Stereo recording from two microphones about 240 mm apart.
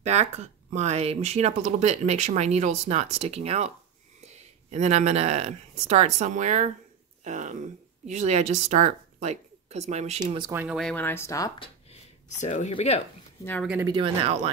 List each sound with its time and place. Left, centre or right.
0.0 s speech: right
10.2 s speech: centre
10.6 s speech: centre
11.9 s speech: left
13.7 s speech: centre